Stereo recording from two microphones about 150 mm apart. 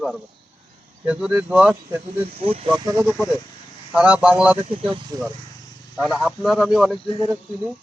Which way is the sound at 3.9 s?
10° right (ahead or behind).